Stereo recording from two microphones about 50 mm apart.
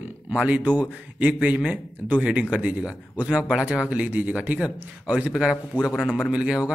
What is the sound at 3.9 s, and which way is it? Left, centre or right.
Speech, right.